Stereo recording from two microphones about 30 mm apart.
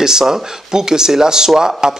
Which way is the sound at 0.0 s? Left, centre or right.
Centre.